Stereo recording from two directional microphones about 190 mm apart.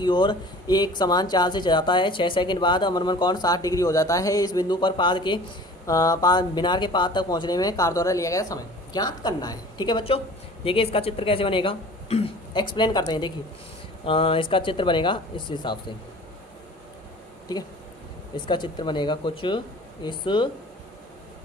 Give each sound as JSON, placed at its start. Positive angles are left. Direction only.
{"t": 0.0, "sound": "speech", "side_deg": 25}
{"t": 18.3, "sound": "speech", "side_deg": 25}